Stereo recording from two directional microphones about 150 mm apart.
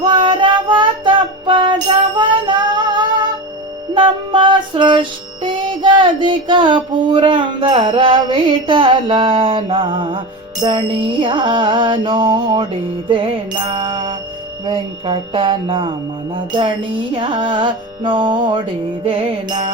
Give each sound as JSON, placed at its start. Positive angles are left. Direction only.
{"t": 0.0, "sound": "child singing", "side_deg": -30}
{"t": 2.1, "sound": "music", "side_deg": -30}